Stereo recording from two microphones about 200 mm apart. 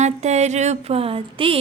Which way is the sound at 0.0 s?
35° right (ahead or behind).